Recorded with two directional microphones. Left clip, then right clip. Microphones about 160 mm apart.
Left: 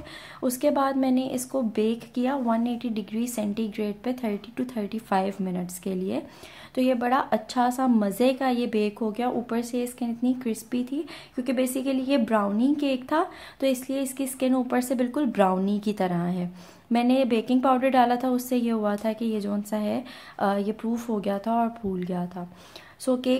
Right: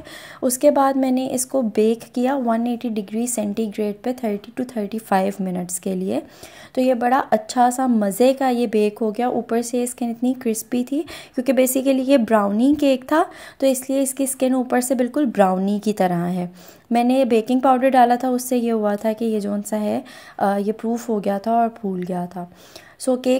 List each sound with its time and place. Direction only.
0.4 s a woman's voice: 35° right (ahead or behind)